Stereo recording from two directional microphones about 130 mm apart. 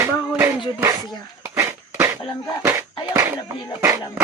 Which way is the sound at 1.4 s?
20° right (ahead or behind).